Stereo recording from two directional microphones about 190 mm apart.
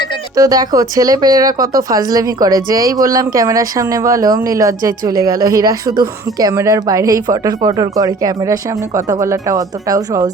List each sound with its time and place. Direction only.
0.3 s speech: 20° right (ahead or behind)